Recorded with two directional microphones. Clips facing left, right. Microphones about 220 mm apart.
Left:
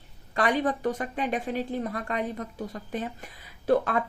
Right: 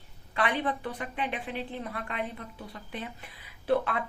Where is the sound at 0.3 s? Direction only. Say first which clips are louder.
Left 4 dB; 45° left (ahead or behind).